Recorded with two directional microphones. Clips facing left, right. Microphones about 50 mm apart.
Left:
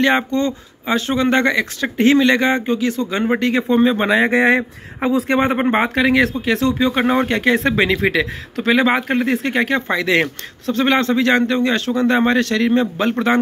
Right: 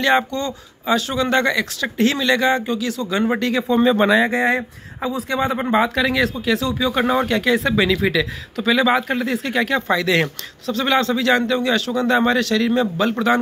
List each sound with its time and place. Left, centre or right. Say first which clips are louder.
0.0 s speech: left 2 dB; left
3.8 s speech: right 3 dB; left
4.2 s speech: left 4 dB; left
6.0 s speech: left 3 dB; left
9.8 s speech: left 1 dB; left